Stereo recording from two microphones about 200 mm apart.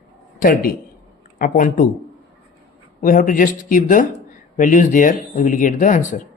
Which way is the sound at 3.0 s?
45° left (ahead or behind).